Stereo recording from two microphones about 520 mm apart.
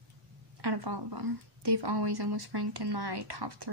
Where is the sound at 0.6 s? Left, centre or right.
Right.